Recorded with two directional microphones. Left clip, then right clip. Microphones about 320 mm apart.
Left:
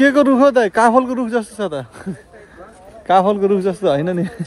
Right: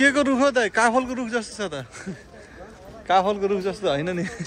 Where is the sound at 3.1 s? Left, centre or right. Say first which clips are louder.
Left 7 dB; centre.